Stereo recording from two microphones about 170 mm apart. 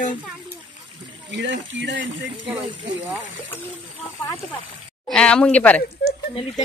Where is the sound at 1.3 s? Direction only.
90° right.